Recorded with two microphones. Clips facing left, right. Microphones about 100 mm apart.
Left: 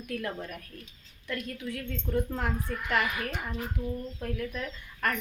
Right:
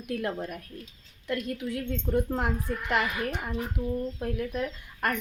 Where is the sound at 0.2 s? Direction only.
30° right (ahead or behind).